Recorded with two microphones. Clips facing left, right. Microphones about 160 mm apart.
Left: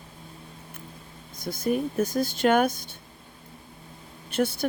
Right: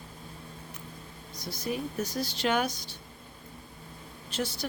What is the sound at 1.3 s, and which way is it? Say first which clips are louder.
Speech: left 7 dB; 50° left (ahead or behind).